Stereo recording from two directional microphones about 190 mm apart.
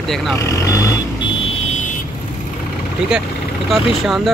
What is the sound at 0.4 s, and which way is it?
Vehicle, 15° left (ahead or behind).